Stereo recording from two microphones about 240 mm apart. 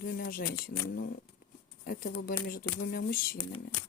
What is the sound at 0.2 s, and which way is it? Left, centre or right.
Speech, left.